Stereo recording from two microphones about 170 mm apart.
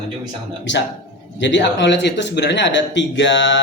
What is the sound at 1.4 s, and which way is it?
Speech, 90° left.